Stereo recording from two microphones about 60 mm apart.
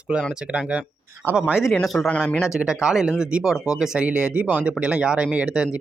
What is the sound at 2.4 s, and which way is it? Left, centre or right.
Speech, centre.